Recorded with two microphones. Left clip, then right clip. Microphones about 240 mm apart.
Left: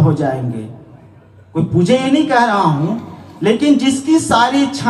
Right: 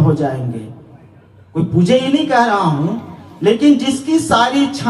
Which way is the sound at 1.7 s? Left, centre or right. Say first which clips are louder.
Even; left.